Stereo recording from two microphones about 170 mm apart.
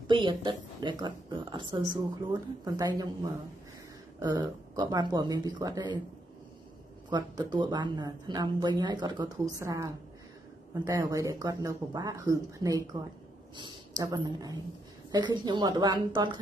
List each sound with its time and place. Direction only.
0.1 s speech: 30° right (ahead or behind)
4.2 s speech: 20° right (ahead or behind)
7.1 s speech: 25° right (ahead or behind)